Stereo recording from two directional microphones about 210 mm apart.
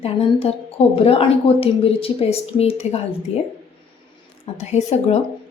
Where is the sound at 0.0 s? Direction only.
30° left (ahead or behind).